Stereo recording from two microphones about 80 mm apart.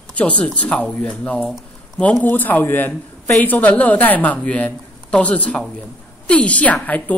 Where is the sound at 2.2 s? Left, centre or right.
Left.